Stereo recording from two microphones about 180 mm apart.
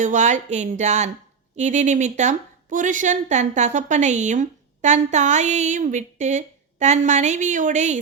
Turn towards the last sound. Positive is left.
turn(degrees=-40)  # may be behind; listen again after turning